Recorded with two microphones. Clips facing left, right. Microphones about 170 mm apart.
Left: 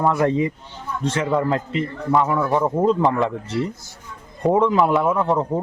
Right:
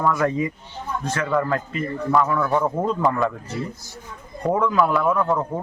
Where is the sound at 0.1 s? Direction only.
25° left (ahead or behind).